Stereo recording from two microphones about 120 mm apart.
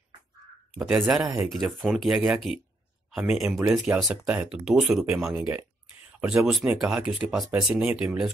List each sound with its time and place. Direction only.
0.7 s speech: 5° right (ahead or behind)
5.1 s speech: 15° right (ahead or behind)